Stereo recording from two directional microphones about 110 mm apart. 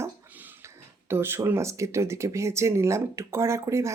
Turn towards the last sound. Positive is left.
turn(degrees=-25)  # may be behind; listen again after turning